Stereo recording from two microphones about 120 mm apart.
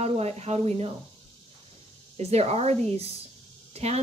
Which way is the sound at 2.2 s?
60° right (ahead or behind).